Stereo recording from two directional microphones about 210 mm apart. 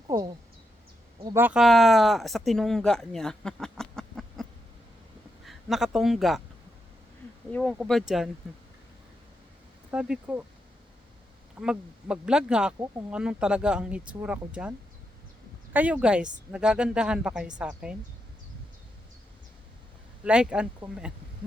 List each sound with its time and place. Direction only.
0.1 s a sound: 15° right (ahead or behind)
1.2 s speech: 10° right (ahead or behind)
5.5 s speech: centre (ahead or behind)
7.5 s speech: centre (ahead or behind)
9.9 s speech: 5° right (ahead or behind)
11.6 s speech: 5° right (ahead or behind)
20.2 s speech: 5° right (ahead or behind)